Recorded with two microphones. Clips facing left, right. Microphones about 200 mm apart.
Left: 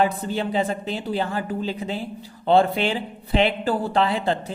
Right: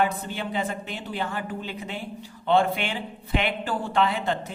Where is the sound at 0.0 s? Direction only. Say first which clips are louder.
Left 4 dB; 35° left (ahead or behind).